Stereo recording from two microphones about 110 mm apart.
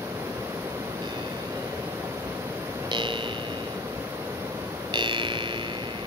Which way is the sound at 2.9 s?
45° right (ahead or behind).